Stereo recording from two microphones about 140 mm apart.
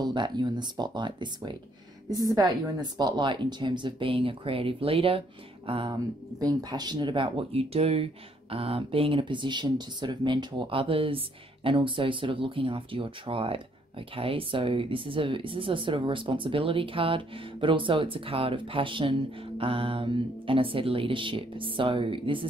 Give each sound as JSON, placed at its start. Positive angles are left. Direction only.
{"t": 0.0, "sound": "a woman's voice", "side_deg": -30}